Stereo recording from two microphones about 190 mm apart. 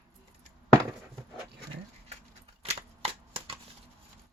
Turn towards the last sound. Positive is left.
turn(degrees=-30)  # may be behind; listen again after turning